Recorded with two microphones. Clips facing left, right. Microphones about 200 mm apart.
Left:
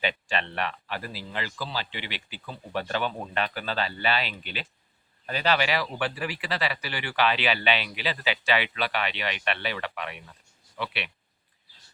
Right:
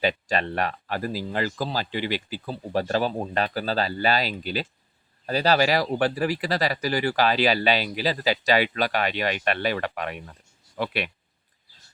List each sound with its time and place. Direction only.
0.0 s speech: 40° right (ahead or behind)